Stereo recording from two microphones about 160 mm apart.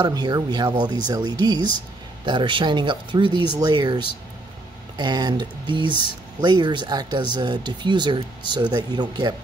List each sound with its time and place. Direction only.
0.0 s speech: 25° right (ahead or behind)